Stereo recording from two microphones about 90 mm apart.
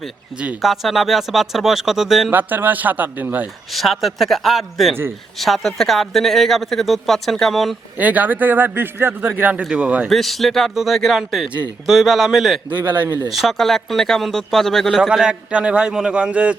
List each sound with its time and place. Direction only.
0.3 s speech: 15° right (ahead or behind)
0.6 s speech: centre (ahead or behind)
2.3 s speech: 20° right (ahead or behind)
3.7 s speech: centre (ahead or behind)
7.9 s speech: 20° right (ahead or behind)
10.1 s speech: centre (ahead or behind); by 16.6 s 15° right (ahead or behind)